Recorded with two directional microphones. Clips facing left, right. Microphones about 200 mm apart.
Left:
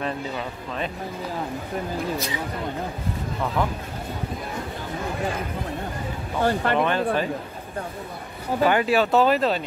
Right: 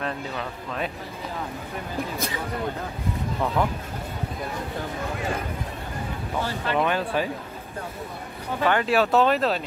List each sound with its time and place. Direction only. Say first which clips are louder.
0.0 s speech: left 2 dB; 5° left (ahead or behind)
6.4 s speech: left 7 dB; 55° left (ahead or behind)
6.8 s speech: left 2 dB; 10° right (ahead or behind)
8.6 s speech: left 1 dB; 10° left (ahead or behind)